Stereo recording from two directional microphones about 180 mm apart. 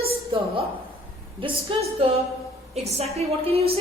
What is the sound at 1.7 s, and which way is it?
A woman's voice, 30° right (ahead or behind).